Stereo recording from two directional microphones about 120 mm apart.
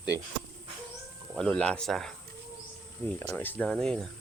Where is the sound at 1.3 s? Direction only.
5° left (ahead or behind).